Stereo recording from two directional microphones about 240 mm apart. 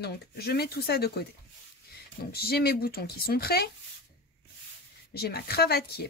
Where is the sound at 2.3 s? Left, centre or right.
Left.